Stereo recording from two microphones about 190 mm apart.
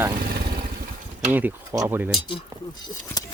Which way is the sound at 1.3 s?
10° right (ahead or behind).